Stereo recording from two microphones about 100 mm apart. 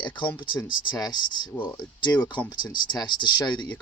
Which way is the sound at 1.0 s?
45° left (ahead or behind).